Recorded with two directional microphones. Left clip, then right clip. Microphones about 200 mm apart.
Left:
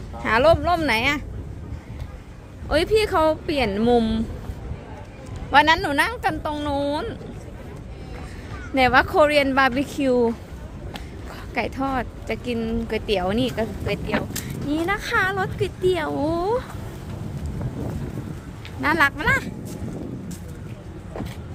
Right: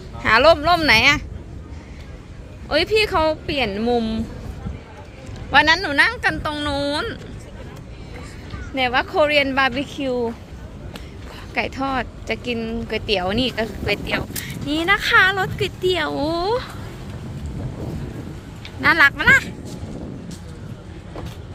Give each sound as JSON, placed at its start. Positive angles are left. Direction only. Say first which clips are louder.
{"t": 0.2, "sound": "speech", "louder": "right 4 dB", "side_deg": 0}
{"t": 2.6, "sound": "speech", "louder": "right 2 dB", "side_deg": 10}
{"t": 5.5, "sound": "speech", "louder": "right 1 dB", "side_deg": 5}
{"t": 8.7, "sound": "speech", "louder": "left 2 dB", "side_deg": 30}
{"t": 11.5, "sound": "speech", "louder": "right 2 dB", "side_deg": 10}
{"t": 18.8, "sound": "speech", "louder": "right 5 dB", "side_deg": 5}